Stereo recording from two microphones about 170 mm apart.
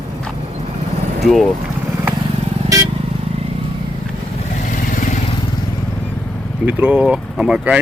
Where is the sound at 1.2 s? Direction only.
Centre (ahead or behind).